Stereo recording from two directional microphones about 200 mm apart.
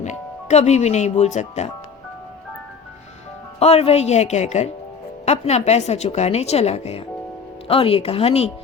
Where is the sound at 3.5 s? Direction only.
30° left (ahead or behind).